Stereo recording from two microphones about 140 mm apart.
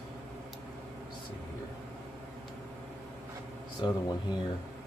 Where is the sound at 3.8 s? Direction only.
35° left (ahead or behind).